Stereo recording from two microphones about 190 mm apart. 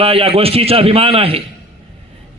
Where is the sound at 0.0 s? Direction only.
30° right (ahead or behind).